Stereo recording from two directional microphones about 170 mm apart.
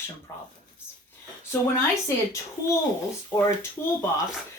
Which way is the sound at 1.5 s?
15° left (ahead or behind).